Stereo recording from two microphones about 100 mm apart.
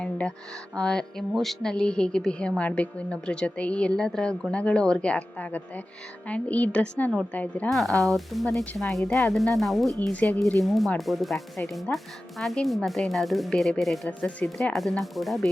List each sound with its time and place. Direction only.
0.0 s music: 10° left (ahead or behind)
0.8 s a woman's voice: 10° left (ahead or behind)
7.7 s speech: centre (ahead or behind)
10.1 s a woman's voice: 15° left (ahead or behind)
10.6 s speech: centre (ahead or behind)
11.9 s a woman's voice: 15° left (ahead or behind)
12.4 s speech: centre (ahead or behind)